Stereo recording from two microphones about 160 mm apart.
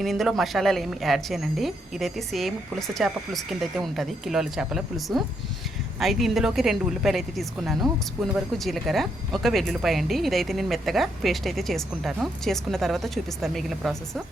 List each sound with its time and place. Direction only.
0.0 s speech: centre (ahead or behind)